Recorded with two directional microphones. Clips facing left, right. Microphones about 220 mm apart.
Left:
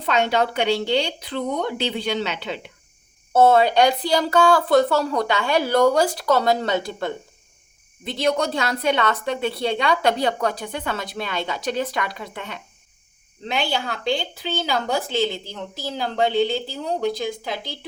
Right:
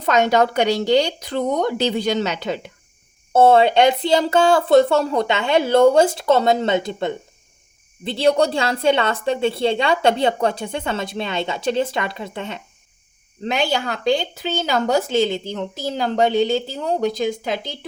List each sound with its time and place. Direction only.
0.0 s speech: 40° right (ahead or behind)
3.3 s a woman's voice: 25° right (ahead or behind)
13.5 s speech: 45° right (ahead or behind)